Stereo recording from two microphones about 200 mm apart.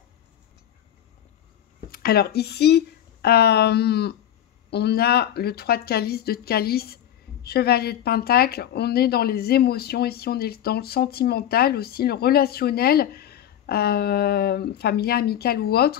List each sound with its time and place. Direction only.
1.9 s speech: 50° left (ahead or behind)